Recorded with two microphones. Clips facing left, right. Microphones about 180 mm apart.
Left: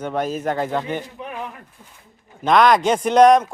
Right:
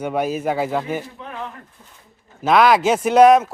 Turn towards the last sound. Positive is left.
turn(degrees=-5)  # may be behind; listen again after turning